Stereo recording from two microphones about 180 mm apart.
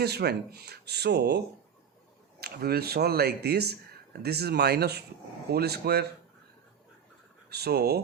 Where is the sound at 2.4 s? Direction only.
60° right (ahead or behind).